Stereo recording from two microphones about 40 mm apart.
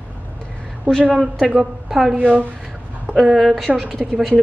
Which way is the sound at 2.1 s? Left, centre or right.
Right.